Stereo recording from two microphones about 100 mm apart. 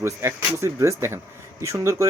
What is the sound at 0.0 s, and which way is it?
Speech, 25° right (ahead or behind).